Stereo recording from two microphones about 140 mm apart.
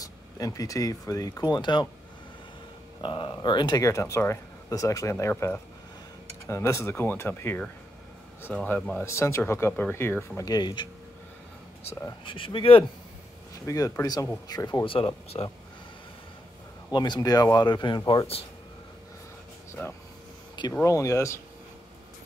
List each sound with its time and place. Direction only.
0.0 s speech: 25° left (ahead or behind)
3.0 s speech: 35° left (ahead or behind); by 9.0 s 5° left (ahead or behind)
9.0 s speech: 20° left (ahead or behind)
12.3 s speech: 35° left (ahead or behind)
13.7 s speech: 20° left (ahead or behind)
14.9 s speech: 40° left (ahead or behind)
16.9 s speech: 30° left (ahead or behind)
19.7 s speech: 15° left (ahead or behind)